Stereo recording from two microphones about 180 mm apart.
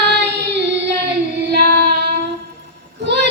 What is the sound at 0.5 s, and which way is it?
Music, 70° right (ahead or behind).